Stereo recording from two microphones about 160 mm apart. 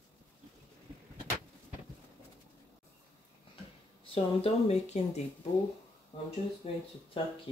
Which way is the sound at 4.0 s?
35° left (ahead or behind).